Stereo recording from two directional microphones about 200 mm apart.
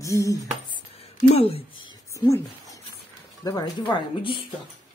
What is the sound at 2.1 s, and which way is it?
Speech, 15° left (ahead or behind).